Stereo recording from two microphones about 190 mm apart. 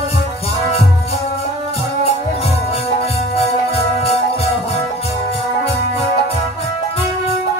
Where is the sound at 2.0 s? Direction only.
35° left (ahead or behind).